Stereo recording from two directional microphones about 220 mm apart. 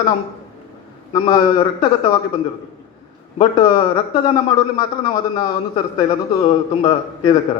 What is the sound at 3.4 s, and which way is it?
A man's voice, 20° left (ahead or behind).